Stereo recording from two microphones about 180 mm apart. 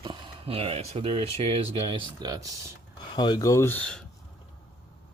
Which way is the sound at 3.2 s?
20° left (ahead or behind).